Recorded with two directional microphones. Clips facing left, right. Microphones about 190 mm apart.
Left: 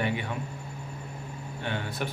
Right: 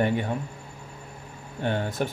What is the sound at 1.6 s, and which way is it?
Speech, 45° right (ahead or behind).